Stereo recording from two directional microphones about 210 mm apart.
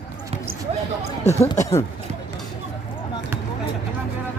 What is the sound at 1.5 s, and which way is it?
Speech, 15° left (ahead or behind).